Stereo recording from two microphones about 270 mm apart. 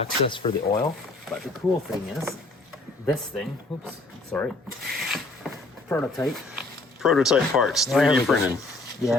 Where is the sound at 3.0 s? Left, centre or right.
Centre.